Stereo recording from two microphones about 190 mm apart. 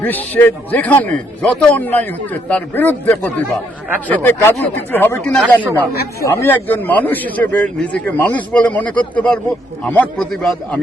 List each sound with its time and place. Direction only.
0.0 s a man's voice: 10° left (ahead or behind)
5.9 s speech: 55° left (ahead or behind)
6.2 s a man's voice: 10° left (ahead or behind)